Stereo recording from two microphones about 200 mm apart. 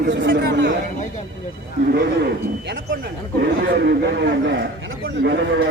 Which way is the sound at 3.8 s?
60° right (ahead or behind).